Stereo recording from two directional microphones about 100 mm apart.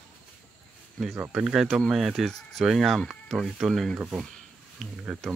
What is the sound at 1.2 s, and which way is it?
Speech, 10° right (ahead or behind).